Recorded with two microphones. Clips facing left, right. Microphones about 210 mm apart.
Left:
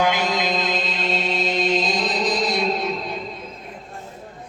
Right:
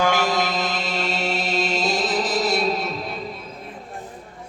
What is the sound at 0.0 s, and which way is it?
Mantra, 15° left (ahead or behind).